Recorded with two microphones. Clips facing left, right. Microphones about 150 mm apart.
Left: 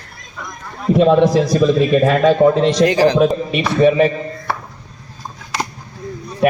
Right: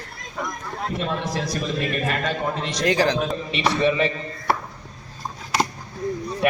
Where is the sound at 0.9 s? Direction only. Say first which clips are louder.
Left 17 dB; 90° left.